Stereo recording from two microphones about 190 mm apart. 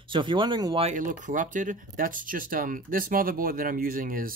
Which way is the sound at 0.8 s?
40° right (ahead or behind).